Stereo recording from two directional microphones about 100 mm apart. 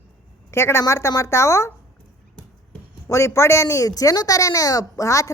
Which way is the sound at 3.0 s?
30° left (ahead or behind).